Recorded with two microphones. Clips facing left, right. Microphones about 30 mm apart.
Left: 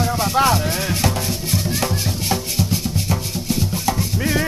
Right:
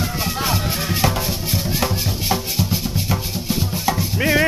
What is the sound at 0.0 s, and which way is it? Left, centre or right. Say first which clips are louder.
Music: left 6 dB; centre.